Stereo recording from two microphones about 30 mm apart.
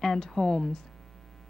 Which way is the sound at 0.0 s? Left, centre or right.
Centre.